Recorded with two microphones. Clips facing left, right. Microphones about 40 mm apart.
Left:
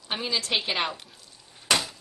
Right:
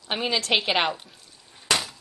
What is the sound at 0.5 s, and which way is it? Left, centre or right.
Speech, centre.